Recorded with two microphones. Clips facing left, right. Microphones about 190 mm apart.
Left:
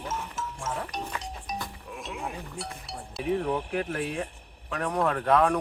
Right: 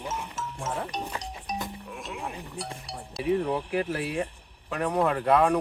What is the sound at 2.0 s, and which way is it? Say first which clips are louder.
Chink: left 1 dB; centre (ahead or behind).